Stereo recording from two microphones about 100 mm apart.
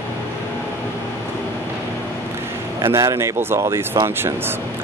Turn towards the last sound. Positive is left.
turn(degrees=-25)  # may be behind; listen again after turning